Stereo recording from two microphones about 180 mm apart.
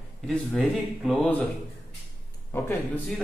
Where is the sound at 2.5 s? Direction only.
15° left (ahead or behind).